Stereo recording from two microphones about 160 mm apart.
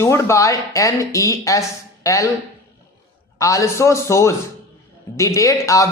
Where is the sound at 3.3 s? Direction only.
20° left (ahead or behind).